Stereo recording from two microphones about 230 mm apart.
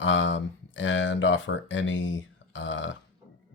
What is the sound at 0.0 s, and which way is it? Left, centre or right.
Speech, left.